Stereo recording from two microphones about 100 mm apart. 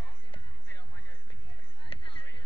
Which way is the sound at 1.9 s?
55° left (ahead or behind).